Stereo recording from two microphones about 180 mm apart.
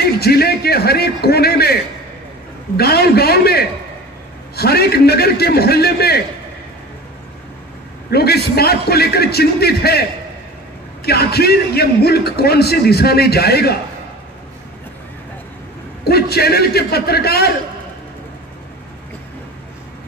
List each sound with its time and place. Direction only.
0.0 s a man's voice: 60° left (ahead or behind)
2.8 s a man's voice: 60° left (ahead or behind)
8.1 s a man's voice: 60° left (ahead or behind)
11.1 s a man's voice: 60° left (ahead or behind)
16.0 s a man's voice: 60° left (ahead or behind)